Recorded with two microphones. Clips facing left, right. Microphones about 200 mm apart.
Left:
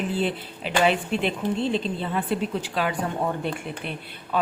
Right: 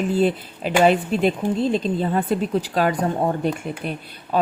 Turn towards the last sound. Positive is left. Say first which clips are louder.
# right 4 dB
turn(degrees=-40)  # may be behind; listen again after turning